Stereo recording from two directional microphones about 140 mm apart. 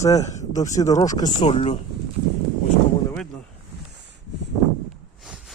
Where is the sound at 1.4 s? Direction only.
45° left (ahead or behind).